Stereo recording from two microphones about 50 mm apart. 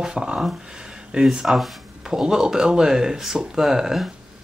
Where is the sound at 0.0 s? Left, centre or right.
Centre.